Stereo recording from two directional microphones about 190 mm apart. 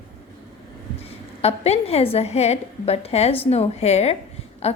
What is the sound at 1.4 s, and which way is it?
A woman's voice, 35° left (ahead or behind).